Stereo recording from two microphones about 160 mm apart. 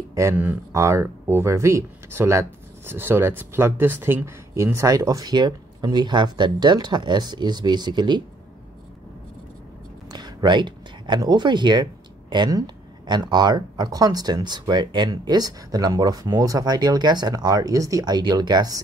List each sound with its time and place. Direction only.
0.1 s speech: 15° right (ahead or behind)
10.1 s speech: 25° right (ahead or behind)